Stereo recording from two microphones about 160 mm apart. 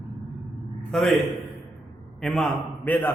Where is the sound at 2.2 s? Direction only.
Centre (ahead or behind).